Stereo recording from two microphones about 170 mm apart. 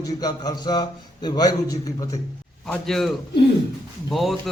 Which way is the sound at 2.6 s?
5° left (ahead or behind).